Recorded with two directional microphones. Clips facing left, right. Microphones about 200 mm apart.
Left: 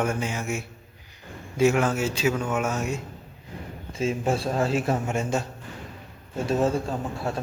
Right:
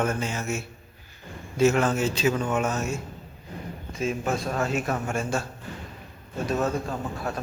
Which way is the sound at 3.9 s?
30° left (ahead or behind).